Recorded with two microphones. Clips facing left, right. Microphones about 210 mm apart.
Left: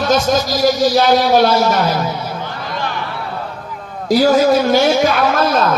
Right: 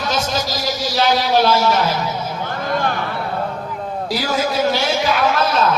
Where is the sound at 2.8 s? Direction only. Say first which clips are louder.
Right 1 dB; 50° right (ahead or behind).